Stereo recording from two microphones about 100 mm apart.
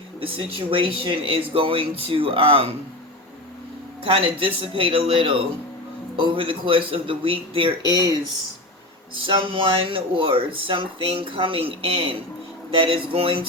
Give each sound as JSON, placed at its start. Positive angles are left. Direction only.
{"t": 0.2, "sound": "speech", "side_deg": -65}
{"t": 4.0, "sound": "speech", "side_deg": -65}
{"t": 9.2, "sound": "speech", "side_deg": -60}